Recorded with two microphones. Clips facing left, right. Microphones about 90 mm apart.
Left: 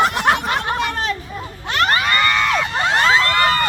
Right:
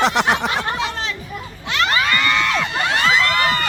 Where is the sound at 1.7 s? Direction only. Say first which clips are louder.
Left 2 dB; 45° left (ahead or behind).